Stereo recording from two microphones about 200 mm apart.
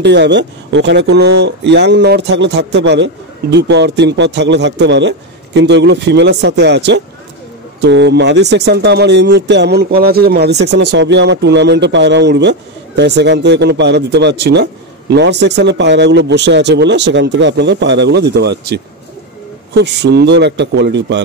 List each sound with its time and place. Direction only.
0.0 s speech: 60° right (ahead or behind)